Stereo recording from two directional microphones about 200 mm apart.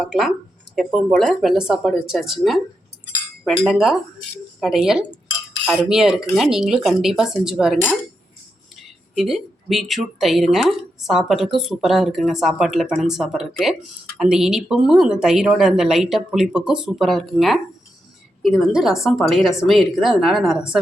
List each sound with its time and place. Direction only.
0.0 s speech: centre (ahead or behind)
9.1 s speech: centre (ahead or behind)